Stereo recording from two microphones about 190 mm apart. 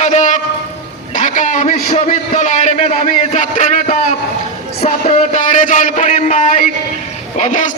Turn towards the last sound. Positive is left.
turn(degrees=40)  # may be behind; listen again after turning